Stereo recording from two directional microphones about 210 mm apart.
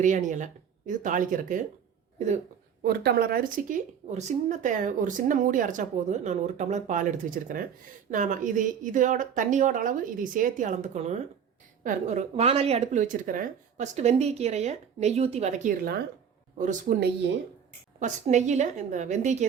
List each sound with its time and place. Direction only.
0.0 s speech: 35° right (ahead or behind)
2.8 s speech: 45° right (ahead or behind)